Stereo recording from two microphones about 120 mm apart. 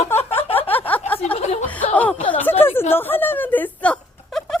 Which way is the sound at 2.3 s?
15° left (ahead or behind).